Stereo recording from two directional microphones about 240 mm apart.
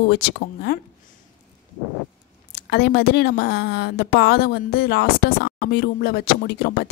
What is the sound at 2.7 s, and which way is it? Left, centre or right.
A woman's voice, left.